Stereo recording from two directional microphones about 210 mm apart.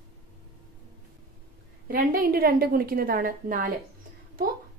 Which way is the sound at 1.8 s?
45° right (ahead or behind).